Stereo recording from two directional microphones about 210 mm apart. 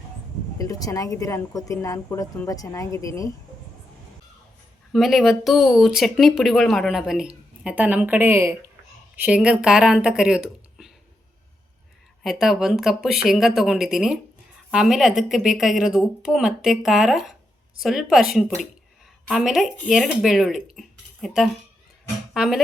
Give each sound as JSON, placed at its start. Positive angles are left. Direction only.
{"t": 0.6, "sound": "speech", "side_deg": 15}
{"t": 4.9, "sound": "speech", "side_deg": 0}
{"t": 12.2, "sound": "speech", "side_deg": 0}